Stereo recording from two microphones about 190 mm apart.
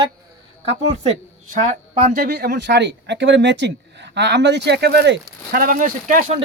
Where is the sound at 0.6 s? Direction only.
40° right (ahead or behind).